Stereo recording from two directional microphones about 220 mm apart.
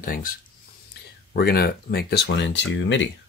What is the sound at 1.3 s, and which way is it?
Speech, 45° left (ahead or behind).